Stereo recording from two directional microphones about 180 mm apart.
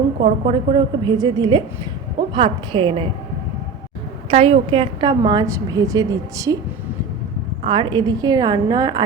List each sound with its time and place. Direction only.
0.2 s a woman's voice: 35° right (ahead or behind)
4.3 s a woman's voice: 35° right (ahead or behind)
7.7 s a woman's voice: 25° right (ahead or behind)